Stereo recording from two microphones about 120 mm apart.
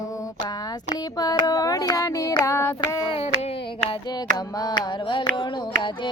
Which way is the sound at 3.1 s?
60° left (ahead or behind).